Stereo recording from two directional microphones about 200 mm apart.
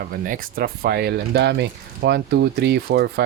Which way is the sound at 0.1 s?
45° right (ahead or behind).